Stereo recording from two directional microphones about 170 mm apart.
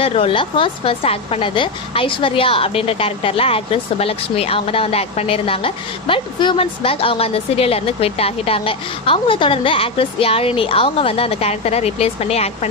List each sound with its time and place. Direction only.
0.0 s a woman's voice: 35° left (ahead or behind)